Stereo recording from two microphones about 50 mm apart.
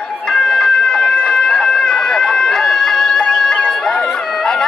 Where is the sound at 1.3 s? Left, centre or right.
Centre.